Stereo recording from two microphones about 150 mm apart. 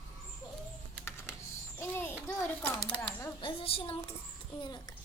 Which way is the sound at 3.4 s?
40° left (ahead or behind).